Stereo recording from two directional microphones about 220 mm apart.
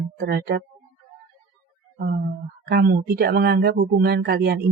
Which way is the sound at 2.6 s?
45° right (ahead or behind).